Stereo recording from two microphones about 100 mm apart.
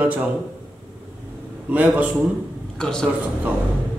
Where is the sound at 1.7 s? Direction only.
15° right (ahead or behind).